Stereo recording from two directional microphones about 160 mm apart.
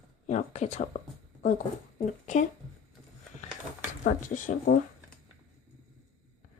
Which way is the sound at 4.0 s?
50° left (ahead or behind).